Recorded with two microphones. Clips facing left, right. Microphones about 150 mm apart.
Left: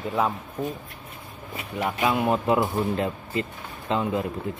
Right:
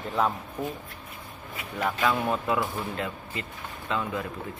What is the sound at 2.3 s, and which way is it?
Speech, 30° left (ahead or behind).